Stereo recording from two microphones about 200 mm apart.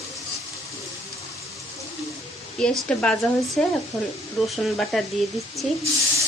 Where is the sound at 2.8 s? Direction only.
5° left (ahead or behind).